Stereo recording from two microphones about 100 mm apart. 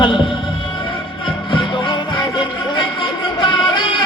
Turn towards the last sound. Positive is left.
turn(degrees=55)  # may be behind; listen again after turning